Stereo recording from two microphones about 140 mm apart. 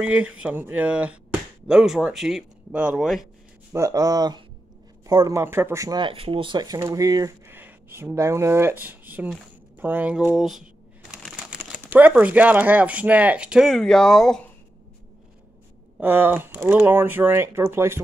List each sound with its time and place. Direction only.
0.0 s speech: 10° right (ahead or behind)
3.7 s speech: 25° right (ahead or behind); by 14.4 s 5° left (ahead or behind)
16.0 s speech: 15° right (ahead or behind)